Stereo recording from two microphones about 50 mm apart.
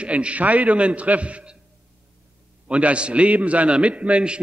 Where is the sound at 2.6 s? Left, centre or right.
Right.